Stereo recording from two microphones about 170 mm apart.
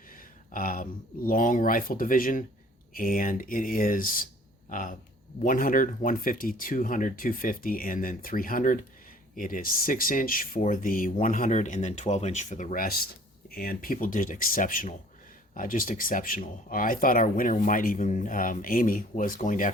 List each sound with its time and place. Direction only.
0.1 s speech: 55° left (ahead or behind)